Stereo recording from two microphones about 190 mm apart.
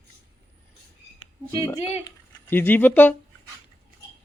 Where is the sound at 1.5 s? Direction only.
20° left (ahead or behind).